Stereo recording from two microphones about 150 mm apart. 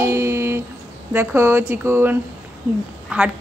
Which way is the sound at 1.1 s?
15° right (ahead or behind).